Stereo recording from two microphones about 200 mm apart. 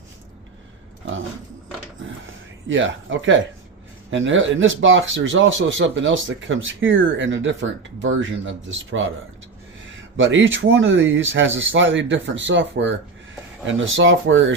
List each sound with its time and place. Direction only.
1.0 s a sound: 70° right (ahead or behind)
2.6 s speech: 70° right (ahead or behind)
10.2 s speech: 70° right (ahead or behind)